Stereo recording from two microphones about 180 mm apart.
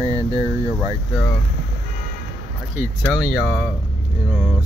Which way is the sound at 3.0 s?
10° left (ahead or behind).